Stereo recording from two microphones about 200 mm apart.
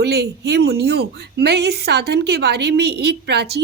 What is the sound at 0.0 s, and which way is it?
Speech, 55° right (ahead or behind).